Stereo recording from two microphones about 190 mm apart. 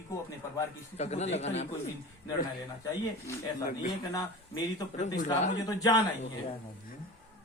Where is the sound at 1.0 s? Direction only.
35° left (ahead or behind).